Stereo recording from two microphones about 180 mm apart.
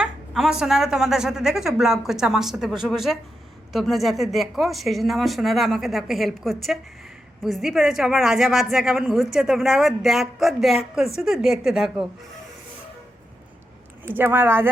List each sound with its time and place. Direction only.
0.0 s a woman's voice: 5° right (ahead or behind)
14.0 s speech: 10° right (ahead or behind)